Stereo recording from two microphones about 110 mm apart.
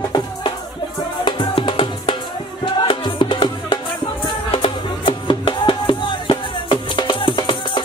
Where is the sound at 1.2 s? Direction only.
50° left (ahead or behind).